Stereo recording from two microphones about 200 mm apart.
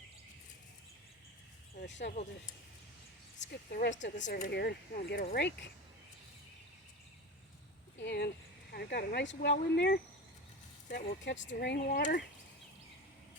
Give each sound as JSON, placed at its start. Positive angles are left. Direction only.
{"t": 1.8, "sound": "speech", "side_deg": 60}
{"t": 3.5, "sound": "speech", "side_deg": 50}
{"t": 7.9, "sound": "speech", "side_deg": 60}
{"t": 11.3, "sound": "speech", "side_deg": 60}
{"t": 11.9, "sound": "speech", "side_deg": 40}